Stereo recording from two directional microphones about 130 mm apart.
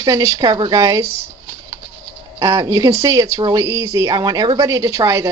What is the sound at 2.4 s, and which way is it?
A woman's voice, 30° right (ahead or behind).